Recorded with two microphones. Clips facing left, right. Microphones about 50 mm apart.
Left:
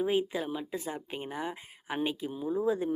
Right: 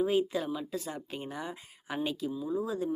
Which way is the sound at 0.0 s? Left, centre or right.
Centre.